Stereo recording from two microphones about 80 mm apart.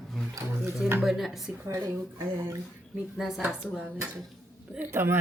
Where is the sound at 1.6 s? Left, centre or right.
Right.